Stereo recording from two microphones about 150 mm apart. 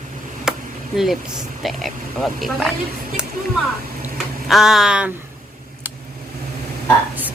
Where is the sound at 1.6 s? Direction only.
Centre (ahead or behind).